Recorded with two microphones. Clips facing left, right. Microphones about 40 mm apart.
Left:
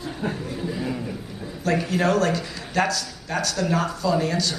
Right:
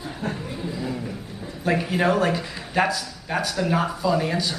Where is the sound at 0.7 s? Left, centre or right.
Centre.